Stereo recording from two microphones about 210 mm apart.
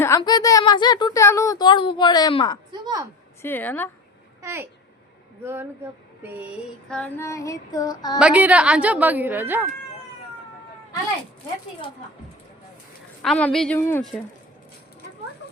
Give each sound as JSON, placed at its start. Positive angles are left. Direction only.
{"t": 0.0, "sound": "a woman's voice", "side_deg": 15}
{"t": 2.8, "sound": "a woman's voice", "side_deg": -15}
{"t": 3.4, "sound": "child singing", "side_deg": 10}
{"t": 4.4, "sound": "a child's voice", "side_deg": -10}
{"t": 6.8, "sound": "child singing", "side_deg": 5}
{"t": 8.2, "sound": "a woman's voice", "side_deg": -5}
{"t": 13.2, "sound": "a woman's voice", "side_deg": 5}